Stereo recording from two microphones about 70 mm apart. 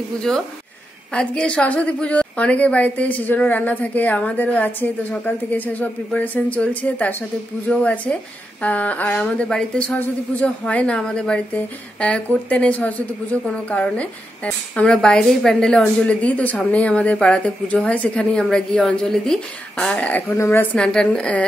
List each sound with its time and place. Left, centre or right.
0.3 s a woman's voice: centre; by 20.6 s left
20.7 s a woman's voice: centre